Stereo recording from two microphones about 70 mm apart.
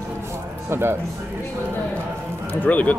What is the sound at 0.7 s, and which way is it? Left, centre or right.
Speech, right.